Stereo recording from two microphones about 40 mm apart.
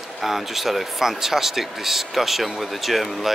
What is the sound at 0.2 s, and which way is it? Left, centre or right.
Speech, centre.